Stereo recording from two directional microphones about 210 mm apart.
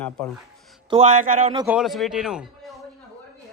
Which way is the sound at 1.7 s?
Centre (ahead or behind).